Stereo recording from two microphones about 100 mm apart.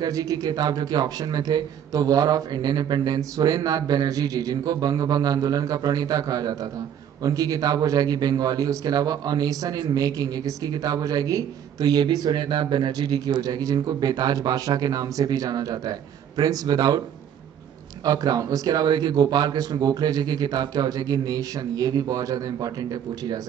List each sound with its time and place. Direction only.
0.0 s speech: 35° right (ahead or behind)
18.0 s speech: 40° right (ahead or behind)